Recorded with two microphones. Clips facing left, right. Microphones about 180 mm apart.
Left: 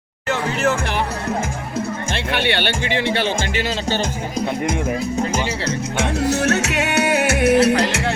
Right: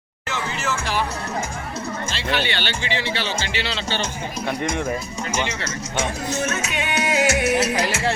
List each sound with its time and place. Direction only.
0.3 s music: 60° left (ahead or behind)
2.1 s speech: 60° left (ahead or behind); by 4.4 s 45° left (ahead or behind)
6.0 s music: 70° left (ahead or behind)